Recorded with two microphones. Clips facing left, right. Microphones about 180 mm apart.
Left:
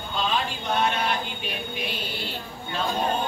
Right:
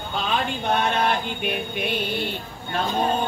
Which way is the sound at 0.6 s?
55° right (ahead or behind).